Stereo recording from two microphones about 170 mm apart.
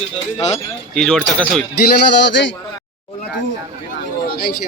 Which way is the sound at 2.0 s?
90° left.